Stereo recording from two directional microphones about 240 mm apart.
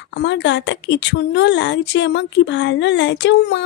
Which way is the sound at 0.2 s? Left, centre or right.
Left.